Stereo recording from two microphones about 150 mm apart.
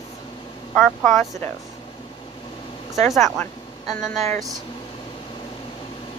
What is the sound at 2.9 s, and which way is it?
Speech, centre (ahead or behind).